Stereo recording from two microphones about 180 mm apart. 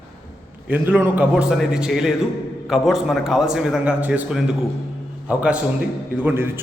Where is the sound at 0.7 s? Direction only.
10° right (ahead or behind).